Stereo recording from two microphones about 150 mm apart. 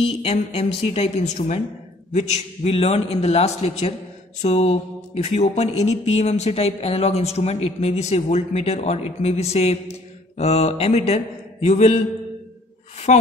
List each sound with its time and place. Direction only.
0.2 s mantra: 45° left (ahead or behind)
13.1 s mantra: 50° left (ahead or behind)